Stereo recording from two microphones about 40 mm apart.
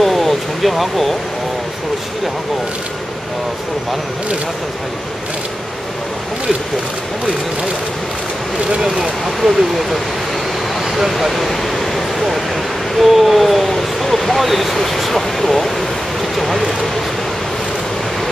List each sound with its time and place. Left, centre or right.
0.0 s vehicle: centre
8.6 s speech: centre
9.0 s speech: centre
11.1 s speech: centre